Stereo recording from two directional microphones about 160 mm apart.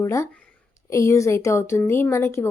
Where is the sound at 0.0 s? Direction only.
20° left (ahead or behind).